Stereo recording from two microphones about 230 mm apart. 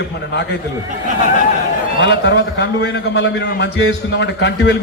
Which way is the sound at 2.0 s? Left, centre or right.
Left.